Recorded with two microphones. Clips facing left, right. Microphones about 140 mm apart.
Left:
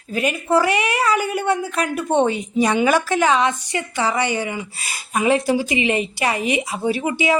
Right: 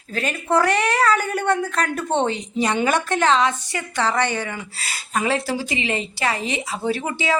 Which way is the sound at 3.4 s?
20° left (ahead or behind).